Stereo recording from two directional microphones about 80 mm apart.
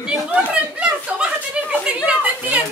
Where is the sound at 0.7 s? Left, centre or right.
Centre.